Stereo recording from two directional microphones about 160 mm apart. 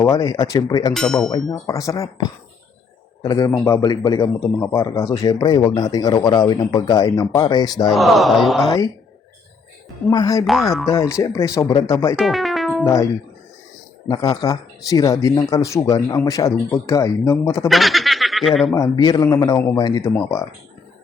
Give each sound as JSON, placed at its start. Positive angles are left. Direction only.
{"t": 0.0, "sound": "speech", "side_deg": 20}
{"t": 0.9, "sound": "a man's voice", "side_deg": 5}
{"t": 1.6, "sound": "speech", "side_deg": 20}
{"t": 3.2, "sound": "speech", "side_deg": 25}
{"t": 7.9, "sound": "a man's voice", "side_deg": 0}
{"t": 10.1, "sound": "speech", "side_deg": 25}
{"t": 10.4, "sound": "a man's voice", "side_deg": 0}
{"t": 10.8, "sound": "speech", "side_deg": 20}
{"t": 12.1, "sound": "speech", "side_deg": 0}
{"t": 12.8, "sound": "speech", "side_deg": 20}
{"t": 14.1, "sound": "speech", "side_deg": 25}
{"t": 17.7, "sound": "speech", "side_deg": 0}
{"t": 18.8, "sound": "speech", "side_deg": 25}